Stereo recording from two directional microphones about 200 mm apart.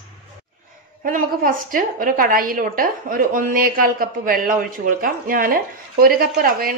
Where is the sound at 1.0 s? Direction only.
45° right (ahead or behind).